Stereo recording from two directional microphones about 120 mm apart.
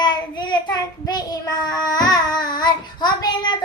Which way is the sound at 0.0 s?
40° left (ahead or behind).